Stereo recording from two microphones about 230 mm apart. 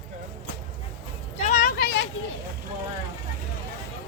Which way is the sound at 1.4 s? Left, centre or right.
Left.